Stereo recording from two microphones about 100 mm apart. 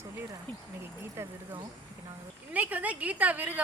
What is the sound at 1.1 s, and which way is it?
Speech, 25° right (ahead or behind).